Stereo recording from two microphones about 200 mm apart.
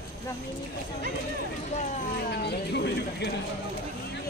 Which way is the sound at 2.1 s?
55° left (ahead or behind).